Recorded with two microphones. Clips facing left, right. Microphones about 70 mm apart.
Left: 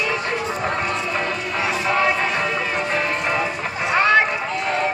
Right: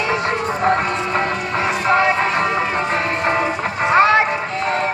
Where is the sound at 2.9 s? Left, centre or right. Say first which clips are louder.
Right 2 dB; right.